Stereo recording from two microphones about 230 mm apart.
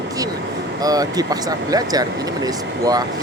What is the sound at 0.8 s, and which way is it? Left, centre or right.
Speech, centre.